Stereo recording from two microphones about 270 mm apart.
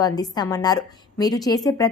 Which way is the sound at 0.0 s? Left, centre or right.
Centre.